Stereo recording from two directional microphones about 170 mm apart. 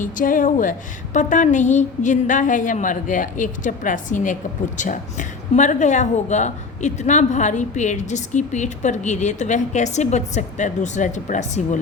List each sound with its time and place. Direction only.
0.0 s a woman's voice: 50° left (ahead or behind)